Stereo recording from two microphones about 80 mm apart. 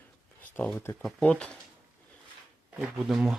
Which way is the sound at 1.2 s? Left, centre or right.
Centre.